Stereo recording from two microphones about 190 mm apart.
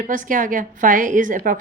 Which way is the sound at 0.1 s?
45° right (ahead or behind).